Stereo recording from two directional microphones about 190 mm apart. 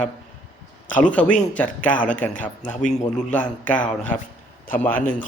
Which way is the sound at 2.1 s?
40° left (ahead or behind).